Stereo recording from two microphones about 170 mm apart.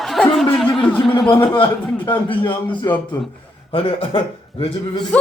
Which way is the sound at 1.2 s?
30° left (ahead or behind).